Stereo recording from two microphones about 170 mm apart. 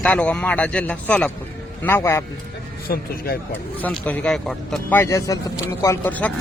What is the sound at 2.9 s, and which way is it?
Speech, 65° left (ahead or behind).